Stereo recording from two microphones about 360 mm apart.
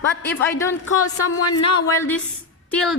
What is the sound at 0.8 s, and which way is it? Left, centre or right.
Speech, left.